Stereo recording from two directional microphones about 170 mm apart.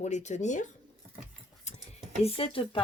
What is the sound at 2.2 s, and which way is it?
Speech, 35° left (ahead or behind).